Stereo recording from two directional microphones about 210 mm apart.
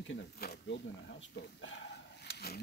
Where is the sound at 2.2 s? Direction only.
50° left (ahead or behind).